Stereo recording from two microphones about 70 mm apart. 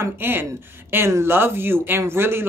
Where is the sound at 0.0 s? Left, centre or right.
Right.